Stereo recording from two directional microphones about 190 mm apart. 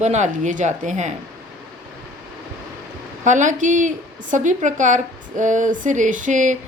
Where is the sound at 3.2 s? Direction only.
40° right (ahead or behind).